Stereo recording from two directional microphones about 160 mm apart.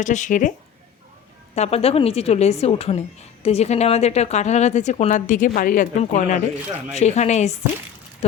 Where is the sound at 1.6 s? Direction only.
40° left (ahead or behind).